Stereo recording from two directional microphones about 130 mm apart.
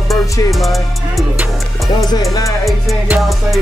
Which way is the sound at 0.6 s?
Centre (ahead or behind).